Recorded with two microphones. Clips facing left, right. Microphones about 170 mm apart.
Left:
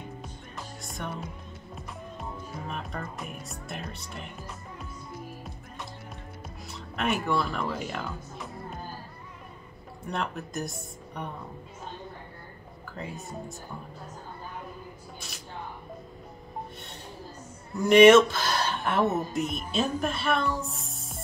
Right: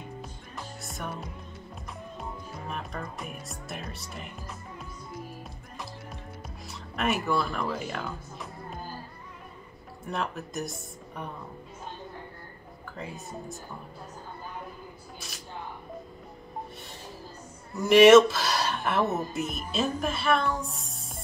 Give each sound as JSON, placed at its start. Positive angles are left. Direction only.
{"t": 0.8, "sound": "music", "side_deg": 0}
{"t": 2.7, "sound": "speech", "side_deg": 0}
{"t": 6.7, "sound": "speech", "side_deg": 0}
{"t": 10.0, "sound": "speech", "side_deg": 0}
{"t": 12.9, "sound": "speech", "side_deg": 0}
{"t": 15.1, "sound": "a sound", "side_deg": 0}
{"t": 17.7, "sound": "a woman's voice", "side_deg": 0}